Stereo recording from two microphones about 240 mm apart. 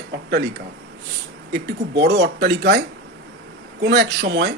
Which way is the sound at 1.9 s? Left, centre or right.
Right.